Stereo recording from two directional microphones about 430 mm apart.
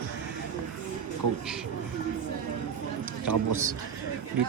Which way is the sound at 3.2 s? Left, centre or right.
Right.